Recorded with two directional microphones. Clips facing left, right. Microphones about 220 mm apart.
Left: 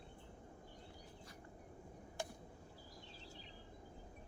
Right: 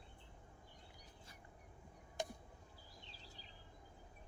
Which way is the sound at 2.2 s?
20° right (ahead or behind).